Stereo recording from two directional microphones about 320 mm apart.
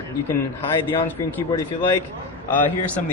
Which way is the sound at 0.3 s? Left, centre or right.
Centre.